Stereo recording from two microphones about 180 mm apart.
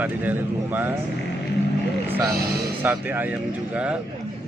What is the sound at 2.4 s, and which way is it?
Speech, 55° right (ahead or behind).